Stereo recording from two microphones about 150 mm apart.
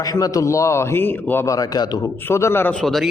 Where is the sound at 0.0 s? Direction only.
25° left (ahead or behind).